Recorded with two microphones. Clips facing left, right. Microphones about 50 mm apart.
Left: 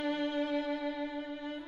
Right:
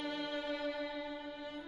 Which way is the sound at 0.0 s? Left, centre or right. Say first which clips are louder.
Left 7 dB; left.